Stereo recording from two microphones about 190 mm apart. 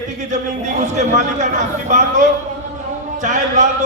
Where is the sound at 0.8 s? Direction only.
40° right (ahead or behind).